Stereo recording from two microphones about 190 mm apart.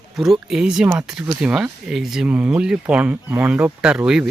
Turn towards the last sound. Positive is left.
turn(degrees=-5)  # may be behind; listen again after turning